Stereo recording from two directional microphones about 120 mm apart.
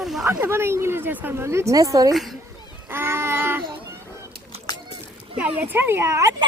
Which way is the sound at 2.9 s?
20° right (ahead or behind).